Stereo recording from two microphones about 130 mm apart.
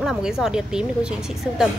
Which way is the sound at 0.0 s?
5° right (ahead or behind).